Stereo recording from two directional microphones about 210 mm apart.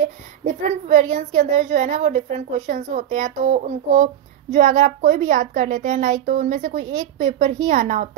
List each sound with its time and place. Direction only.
0.7 s a woman's voice: 35° right (ahead or behind)